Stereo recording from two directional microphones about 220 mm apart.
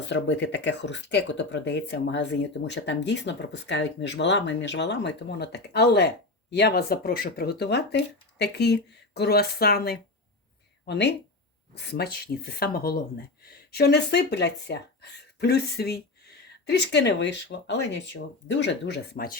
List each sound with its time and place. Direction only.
0.1 s speech: 55° left (ahead or behind)